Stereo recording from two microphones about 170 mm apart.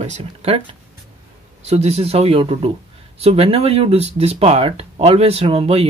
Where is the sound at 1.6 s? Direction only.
40° right (ahead or behind).